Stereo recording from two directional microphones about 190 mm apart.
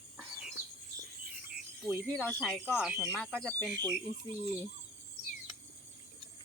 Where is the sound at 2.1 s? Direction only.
5° left (ahead or behind).